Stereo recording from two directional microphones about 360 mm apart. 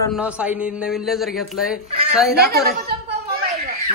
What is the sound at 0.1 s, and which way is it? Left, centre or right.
Speech, centre.